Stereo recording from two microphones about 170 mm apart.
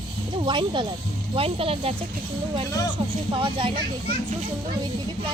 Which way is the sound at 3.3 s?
30° right (ahead or behind).